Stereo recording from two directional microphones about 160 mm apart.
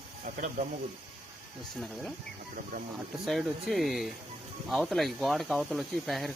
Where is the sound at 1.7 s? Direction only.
Centre (ahead or behind).